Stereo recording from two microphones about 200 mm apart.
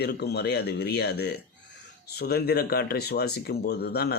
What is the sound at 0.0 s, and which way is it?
Speech, 55° left (ahead or behind).